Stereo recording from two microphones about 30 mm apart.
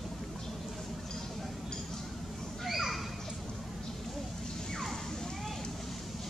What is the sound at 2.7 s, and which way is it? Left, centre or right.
Children playing, centre.